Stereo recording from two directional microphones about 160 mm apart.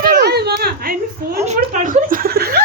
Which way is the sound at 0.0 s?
90° right.